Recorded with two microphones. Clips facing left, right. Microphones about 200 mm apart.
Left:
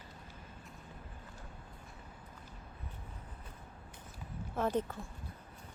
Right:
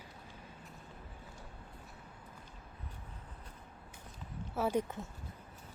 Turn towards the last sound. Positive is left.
turn(degrees=-15)  # may be behind; listen again after turning